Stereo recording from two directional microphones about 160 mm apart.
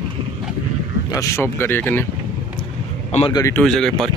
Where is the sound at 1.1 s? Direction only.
20° left (ahead or behind).